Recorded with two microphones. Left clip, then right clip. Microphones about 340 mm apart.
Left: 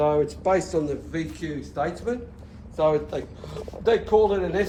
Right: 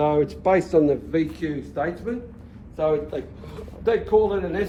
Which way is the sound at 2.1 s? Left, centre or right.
Centre.